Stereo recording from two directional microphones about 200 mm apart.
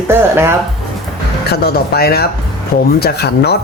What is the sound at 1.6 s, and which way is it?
Speech, 50° left (ahead or behind).